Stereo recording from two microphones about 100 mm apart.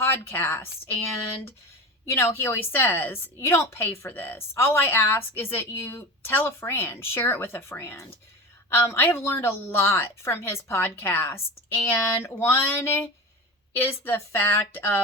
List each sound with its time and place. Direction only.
0.0 s a woman's voice: 25° left (ahead or behind)
2.1 s a woman's voice: 25° left (ahead or behind)